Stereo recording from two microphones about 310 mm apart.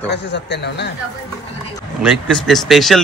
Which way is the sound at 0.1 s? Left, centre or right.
Left.